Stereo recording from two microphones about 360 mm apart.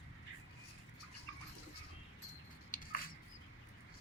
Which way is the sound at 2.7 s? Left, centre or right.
Left.